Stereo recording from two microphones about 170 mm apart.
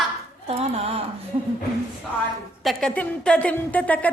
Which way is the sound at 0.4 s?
35° right (ahead or behind).